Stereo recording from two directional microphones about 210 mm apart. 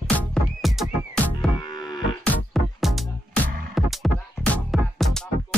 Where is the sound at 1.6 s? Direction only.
20° left (ahead or behind).